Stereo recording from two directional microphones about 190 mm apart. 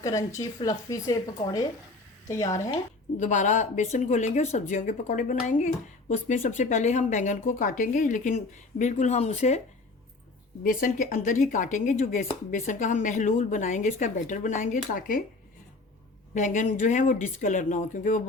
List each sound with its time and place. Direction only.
0.0 s a woman's voice: 15° left (ahead or behind)
2.2 s a woman's voice: 15° left (ahead or behind)
3.2 s speech: 40° left (ahead or behind)
10.6 s speech: 45° left (ahead or behind)
16.3 s speech: 40° left (ahead or behind)